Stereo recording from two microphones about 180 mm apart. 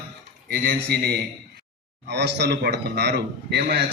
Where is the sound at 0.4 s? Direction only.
55° right (ahead or behind).